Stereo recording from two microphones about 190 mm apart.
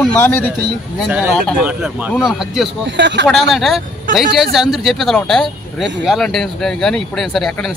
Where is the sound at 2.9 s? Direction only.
65° right (ahead or behind).